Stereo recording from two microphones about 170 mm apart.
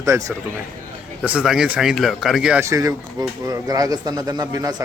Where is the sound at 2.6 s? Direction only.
20° right (ahead or behind).